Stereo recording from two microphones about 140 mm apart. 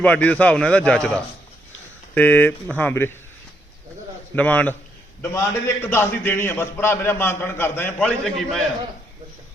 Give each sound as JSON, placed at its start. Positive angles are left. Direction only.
{"t": 0.0, "sound": "a man's voice", "side_deg": 10}
{"t": 4.4, "sound": "a man's voice", "side_deg": 10}